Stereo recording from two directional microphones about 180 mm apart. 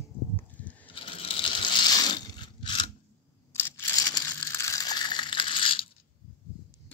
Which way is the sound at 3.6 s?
15° left (ahead or behind).